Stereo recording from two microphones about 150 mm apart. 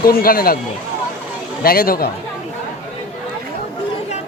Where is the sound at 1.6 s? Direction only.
80° left.